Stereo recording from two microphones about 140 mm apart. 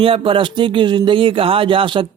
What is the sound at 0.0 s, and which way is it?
Speech, 40° right (ahead or behind).